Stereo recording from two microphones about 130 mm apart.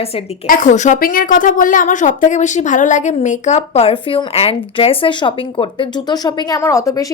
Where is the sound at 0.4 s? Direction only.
85° left.